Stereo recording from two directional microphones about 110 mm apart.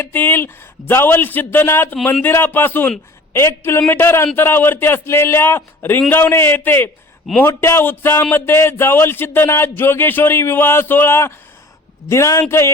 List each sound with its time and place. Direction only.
0.0 s speech: 20° left (ahead or behind)